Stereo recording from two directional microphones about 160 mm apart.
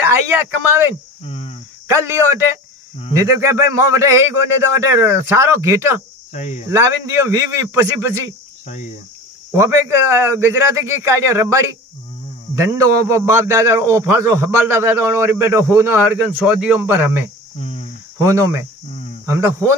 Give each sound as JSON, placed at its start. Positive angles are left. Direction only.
{"t": 0.0, "sound": "speech", "side_deg": -15}
{"t": 1.2, "sound": "cricket", "side_deg": 40}
{"t": 1.9, "sound": "a man's voice", "side_deg": -15}
{"t": 6.3, "sound": "speech", "side_deg": 45}
{"t": 6.7, "sound": "a man's voice", "side_deg": -15}
{"t": 9.5, "sound": "a man's voice", "side_deg": -15}
{"t": 17.6, "sound": "cricket", "side_deg": 40}
{"t": 18.2, "sound": "a man's voice", "side_deg": -15}